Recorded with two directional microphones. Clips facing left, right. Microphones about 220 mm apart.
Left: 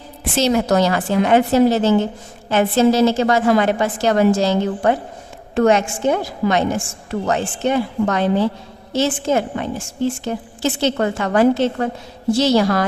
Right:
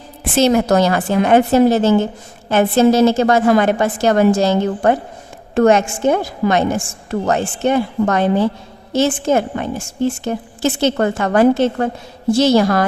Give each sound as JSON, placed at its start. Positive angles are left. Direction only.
{"t": 0.3, "sound": "a woman's voice", "side_deg": -50}